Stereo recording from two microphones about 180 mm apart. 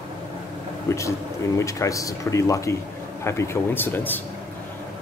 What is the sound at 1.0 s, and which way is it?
Speech, 15° left (ahead or behind).